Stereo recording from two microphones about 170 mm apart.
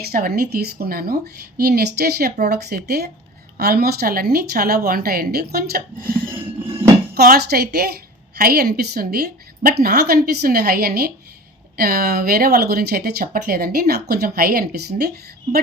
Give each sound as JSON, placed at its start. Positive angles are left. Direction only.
{"t": 0.0, "sound": "a woman's voice", "side_deg": -60}
{"t": 7.1, "sound": "a woman's voice", "side_deg": -70}